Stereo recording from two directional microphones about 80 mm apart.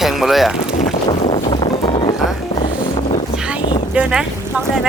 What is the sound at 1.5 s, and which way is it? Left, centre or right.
Boat, left.